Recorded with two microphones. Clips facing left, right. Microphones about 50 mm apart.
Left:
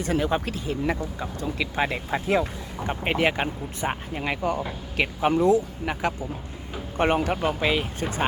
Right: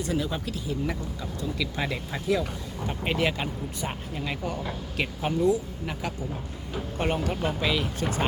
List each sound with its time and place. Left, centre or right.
0.0 s speech: left
4.2 s speech: left
6.9 s speech: left